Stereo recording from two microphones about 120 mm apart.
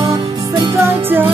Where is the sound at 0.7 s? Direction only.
20° right (ahead or behind).